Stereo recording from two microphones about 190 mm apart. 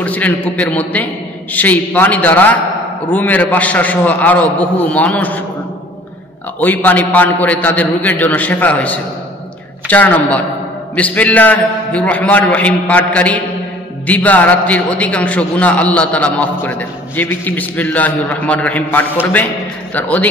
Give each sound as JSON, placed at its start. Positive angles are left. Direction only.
{"t": 0.0, "sound": "a man's voice", "side_deg": 10}
{"t": 6.6, "sound": "a man's voice", "side_deg": 10}